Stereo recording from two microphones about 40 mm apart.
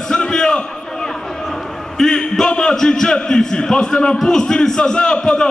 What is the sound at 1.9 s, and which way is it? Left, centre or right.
A man's voice, centre.